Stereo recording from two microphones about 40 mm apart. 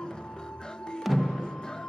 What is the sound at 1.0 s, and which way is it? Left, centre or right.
Music, centre.